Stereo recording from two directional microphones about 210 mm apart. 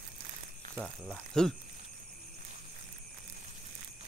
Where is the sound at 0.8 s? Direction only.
5° left (ahead or behind).